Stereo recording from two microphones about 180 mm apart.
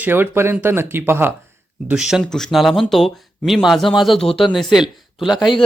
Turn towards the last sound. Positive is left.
turn(degrees=0)  # may be behind; listen again after turning